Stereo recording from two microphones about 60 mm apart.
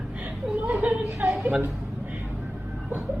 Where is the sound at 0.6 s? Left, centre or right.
Right.